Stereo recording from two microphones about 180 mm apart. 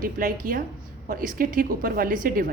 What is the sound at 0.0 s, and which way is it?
A woman's voice, 50° right (ahead or behind).